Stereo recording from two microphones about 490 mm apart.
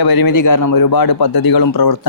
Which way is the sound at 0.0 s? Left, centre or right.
Left.